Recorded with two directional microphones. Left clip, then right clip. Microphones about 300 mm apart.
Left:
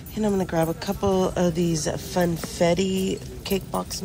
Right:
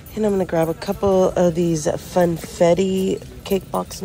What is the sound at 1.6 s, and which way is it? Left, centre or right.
Speech, left.